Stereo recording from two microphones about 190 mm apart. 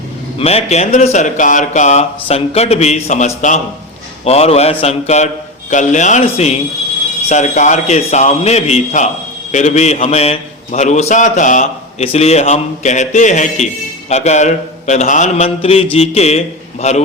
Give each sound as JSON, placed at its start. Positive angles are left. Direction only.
{"t": 0.3, "sound": "a man's voice", "side_deg": 35}